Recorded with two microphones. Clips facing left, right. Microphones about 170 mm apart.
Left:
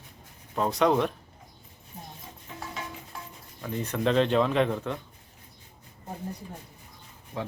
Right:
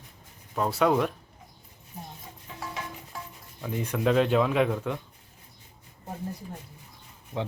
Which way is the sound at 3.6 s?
10° right (ahead or behind).